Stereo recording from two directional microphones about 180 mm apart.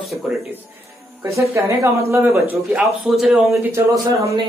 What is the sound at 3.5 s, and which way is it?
Speech, 15° right (ahead or behind).